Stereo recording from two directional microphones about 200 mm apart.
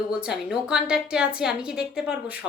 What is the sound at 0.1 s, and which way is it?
A woman's voice, 5° right (ahead or behind).